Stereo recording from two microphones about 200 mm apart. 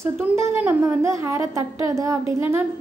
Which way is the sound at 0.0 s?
10° right (ahead or behind).